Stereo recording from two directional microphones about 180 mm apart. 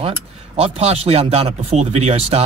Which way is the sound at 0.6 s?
35° right (ahead or behind).